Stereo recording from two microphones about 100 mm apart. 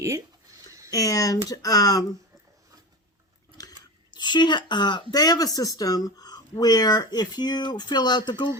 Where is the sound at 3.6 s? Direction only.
45° left (ahead or behind).